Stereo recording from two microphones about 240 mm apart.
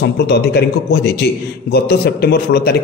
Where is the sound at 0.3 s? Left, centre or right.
Left.